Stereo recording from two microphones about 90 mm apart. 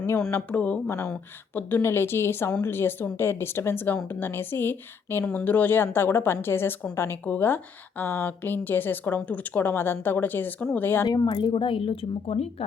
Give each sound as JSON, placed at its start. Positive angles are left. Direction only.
{"t": 0.3, "sound": "a woman's voice", "side_deg": 20}
{"t": 11.0, "sound": "speech", "side_deg": 45}